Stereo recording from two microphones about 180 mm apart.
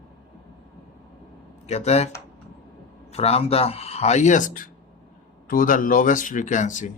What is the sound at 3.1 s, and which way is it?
Speech, 35° left (ahead or behind).